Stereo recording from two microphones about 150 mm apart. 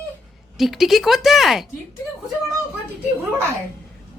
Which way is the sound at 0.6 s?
Centre (ahead or behind).